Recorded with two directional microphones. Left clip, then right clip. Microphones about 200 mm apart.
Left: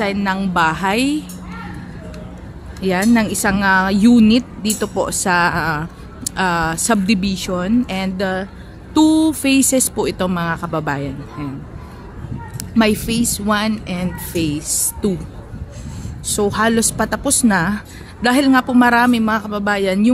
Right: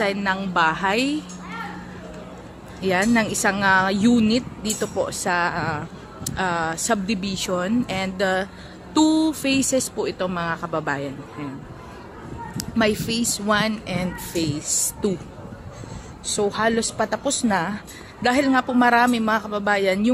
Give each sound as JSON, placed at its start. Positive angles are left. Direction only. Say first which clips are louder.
{"t": 0.0, "sound": "speech", "louder": "left 3 dB", "side_deg": 5}
{"t": 2.8, "sound": "speech", "louder": "left 3 dB", "side_deg": 5}
{"t": 10.3, "sound": "speech", "louder": "left 4 dB", "side_deg": 10}
{"t": 12.5, "sound": "speech", "louder": "left 5 dB", "side_deg": 15}
{"t": 16.3, "sound": "speech", "louder": "left 4 dB", "side_deg": 15}